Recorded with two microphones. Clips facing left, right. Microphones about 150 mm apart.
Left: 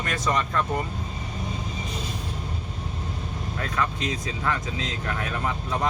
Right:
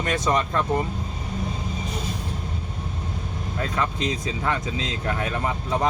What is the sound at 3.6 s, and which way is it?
Speech, 20° right (ahead or behind).